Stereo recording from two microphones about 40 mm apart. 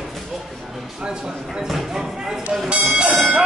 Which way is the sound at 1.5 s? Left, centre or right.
Centre.